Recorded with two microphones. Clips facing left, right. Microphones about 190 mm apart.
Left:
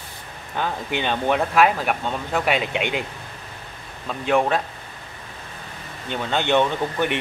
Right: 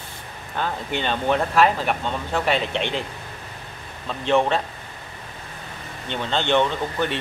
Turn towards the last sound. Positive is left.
turn(degrees=15)  # may be behind; listen again after turning